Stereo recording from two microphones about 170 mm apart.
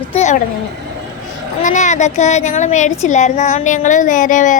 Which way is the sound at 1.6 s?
45° left (ahead or behind).